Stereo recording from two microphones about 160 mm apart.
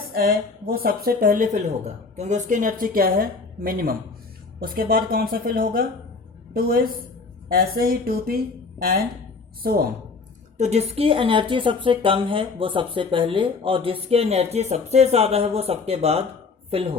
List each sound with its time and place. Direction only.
0.1 s a woman's voice: 65° right (ahead or behind)
7.5 s music: 70° right (ahead or behind)
10.6 s a woman's voice: 40° right (ahead or behind)